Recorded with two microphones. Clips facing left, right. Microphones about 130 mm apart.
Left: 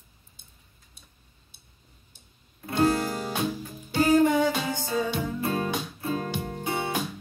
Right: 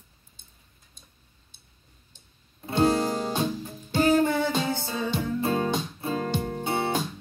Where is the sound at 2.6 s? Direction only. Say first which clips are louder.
Right 1 dB; 25° right (ahead or behind).